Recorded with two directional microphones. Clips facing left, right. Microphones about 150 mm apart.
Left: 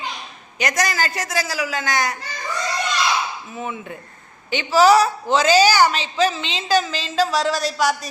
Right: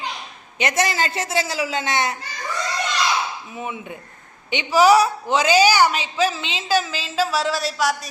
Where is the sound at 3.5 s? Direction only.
10° right (ahead or behind).